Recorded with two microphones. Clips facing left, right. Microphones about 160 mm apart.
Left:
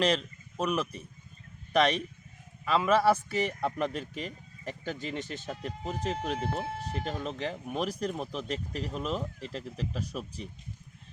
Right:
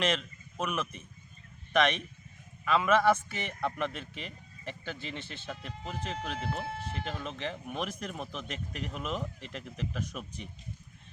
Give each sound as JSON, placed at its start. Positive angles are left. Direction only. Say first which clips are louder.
{"t": 0.0, "sound": "speech", "louder": "left 3 dB", "side_deg": 35}